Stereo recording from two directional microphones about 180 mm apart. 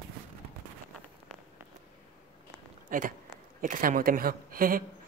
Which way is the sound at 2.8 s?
45° right (ahead or behind).